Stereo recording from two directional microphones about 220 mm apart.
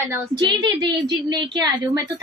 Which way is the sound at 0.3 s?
20° right (ahead or behind).